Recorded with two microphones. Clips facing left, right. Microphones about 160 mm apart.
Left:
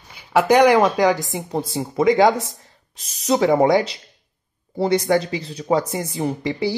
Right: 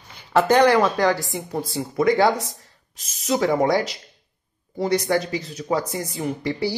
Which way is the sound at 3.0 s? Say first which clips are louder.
Left 3 dB; 35° left (ahead or behind).